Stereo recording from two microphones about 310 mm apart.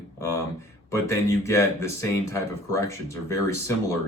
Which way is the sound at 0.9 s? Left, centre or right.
Centre.